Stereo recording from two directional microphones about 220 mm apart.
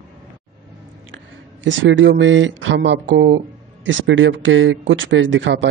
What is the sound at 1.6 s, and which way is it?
Speech, 55° right (ahead or behind).